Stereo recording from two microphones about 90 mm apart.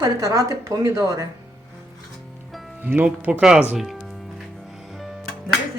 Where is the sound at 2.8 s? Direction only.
20° right (ahead or behind).